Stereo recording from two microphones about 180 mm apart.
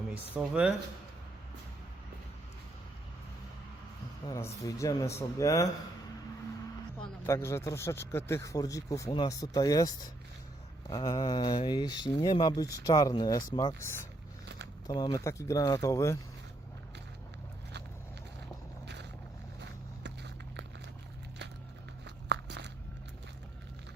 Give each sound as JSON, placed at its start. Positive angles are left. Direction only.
{"t": 0.1, "sound": "speech", "side_deg": -5}
{"t": 4.3, "sound": "speech", "side_deg": 15}
{"t": 7.3, "sound": "speech", "side_deg": 15}
{"t": 19.5, "sound": "vehicle", "side_deg": -75}
{"t": 22.0, "sound": "a sound", "side_deg": -70}